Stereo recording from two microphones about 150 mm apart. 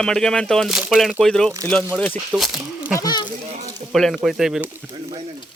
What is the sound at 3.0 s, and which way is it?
Speech, 30° left (ahead or behind).